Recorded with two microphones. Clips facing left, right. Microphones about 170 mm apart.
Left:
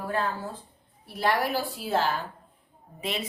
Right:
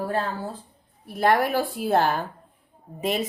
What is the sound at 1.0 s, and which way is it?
Speech, 50° right (ahead or behind).